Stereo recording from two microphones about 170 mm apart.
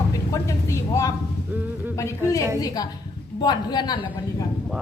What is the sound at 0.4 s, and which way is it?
Vehicle, 20° left (ahead or behind).